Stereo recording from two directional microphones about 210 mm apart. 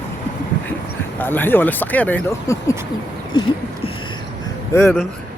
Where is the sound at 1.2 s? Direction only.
10° left (ahead or behind).